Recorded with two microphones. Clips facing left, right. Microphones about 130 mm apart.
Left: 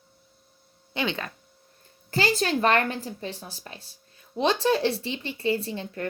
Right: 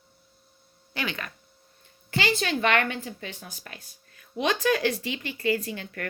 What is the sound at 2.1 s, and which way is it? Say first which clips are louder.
A woman's voice: left 2 dB; 40° left (ahead or behind).